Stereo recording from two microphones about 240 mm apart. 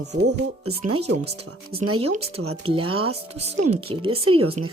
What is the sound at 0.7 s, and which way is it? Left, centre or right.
Speech, right.